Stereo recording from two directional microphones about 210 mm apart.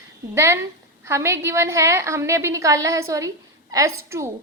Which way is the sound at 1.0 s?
15° right (ahead or behind).